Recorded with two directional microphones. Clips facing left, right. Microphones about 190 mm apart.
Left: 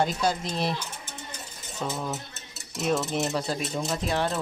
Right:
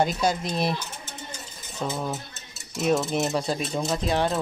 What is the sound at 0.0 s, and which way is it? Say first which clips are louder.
Speech: right 2 dB; 10° right (ahead or behind).